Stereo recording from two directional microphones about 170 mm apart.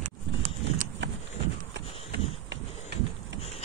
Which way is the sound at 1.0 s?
90° right.